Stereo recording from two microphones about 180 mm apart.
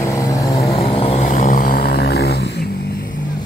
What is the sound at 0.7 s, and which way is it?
Vehicle, 30° left (ahead or behind).